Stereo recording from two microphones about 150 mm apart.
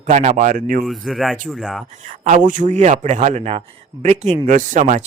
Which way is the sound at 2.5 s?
55° right (ahead or behind).